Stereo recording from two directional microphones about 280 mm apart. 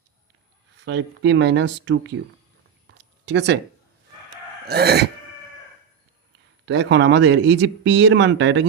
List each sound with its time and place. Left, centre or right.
0.9 s speech: right
3.0 s a sound: right
4.6 s speech: right
6.7 s speech: right